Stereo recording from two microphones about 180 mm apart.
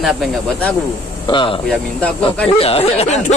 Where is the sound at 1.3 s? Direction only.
25° left (ahead or behind).